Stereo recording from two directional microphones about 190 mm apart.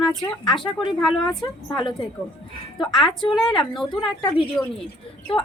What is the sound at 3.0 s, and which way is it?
Speech, 25° left (ahead or behind).